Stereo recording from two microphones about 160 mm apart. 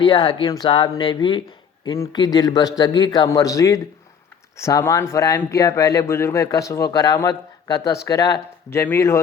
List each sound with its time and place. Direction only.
0.0 s speech: 30° left (ahead or behind)